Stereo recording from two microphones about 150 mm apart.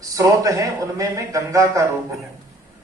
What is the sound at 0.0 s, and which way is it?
A man's voice, 20° right (ahead or behind).